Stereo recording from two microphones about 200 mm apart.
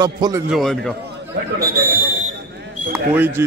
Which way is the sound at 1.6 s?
50° right (ahead or behind).